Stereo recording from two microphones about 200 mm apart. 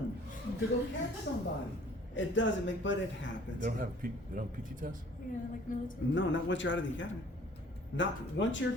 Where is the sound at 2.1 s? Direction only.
65° left (ahead or behind).